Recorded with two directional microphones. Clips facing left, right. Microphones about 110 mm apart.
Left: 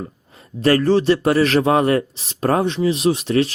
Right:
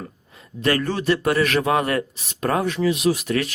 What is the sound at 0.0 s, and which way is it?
A man's voice, 30° left (ahead or behind).